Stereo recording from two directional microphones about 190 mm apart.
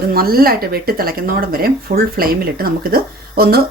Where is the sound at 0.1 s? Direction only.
50° right (ahead or behind).